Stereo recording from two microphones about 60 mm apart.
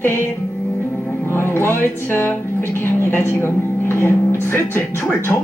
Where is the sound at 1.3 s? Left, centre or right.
Left.